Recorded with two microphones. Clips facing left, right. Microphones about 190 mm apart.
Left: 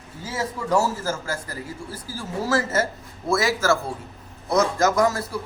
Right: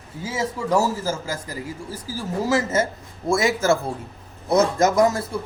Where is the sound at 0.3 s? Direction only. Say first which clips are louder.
Right 2 dB; 10° right (ahead or behind).